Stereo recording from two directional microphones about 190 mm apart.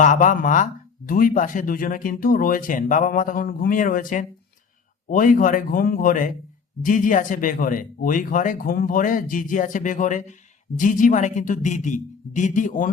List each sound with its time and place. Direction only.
0.0 s speech: 40° left (ahead or behind)